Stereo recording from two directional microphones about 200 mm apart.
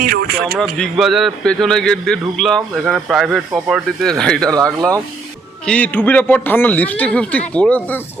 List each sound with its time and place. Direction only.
0.0 s speech: 50° right (ahead or behind)
0.6 s a man's voice: centre (ahead or behind)
5.6 s a man's voice: 5° left (ahead or behind)